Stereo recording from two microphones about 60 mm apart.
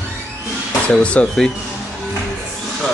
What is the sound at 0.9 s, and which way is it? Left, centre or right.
Speech, left.